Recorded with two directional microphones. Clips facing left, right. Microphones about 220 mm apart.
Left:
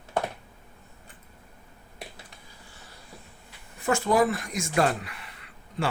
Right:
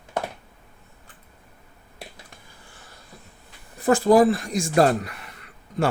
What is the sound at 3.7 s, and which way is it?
Speech, 35° right (ahead or behind).